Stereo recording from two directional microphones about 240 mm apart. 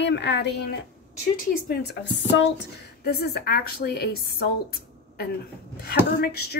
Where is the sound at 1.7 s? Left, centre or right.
Left.